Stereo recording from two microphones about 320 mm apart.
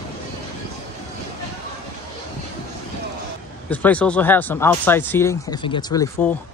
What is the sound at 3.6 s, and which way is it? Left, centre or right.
Speech, centre.